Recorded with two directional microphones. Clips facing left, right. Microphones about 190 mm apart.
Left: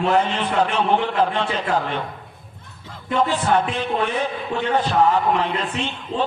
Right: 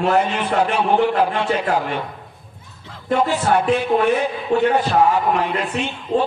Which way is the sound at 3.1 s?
10° right (ahead or behind).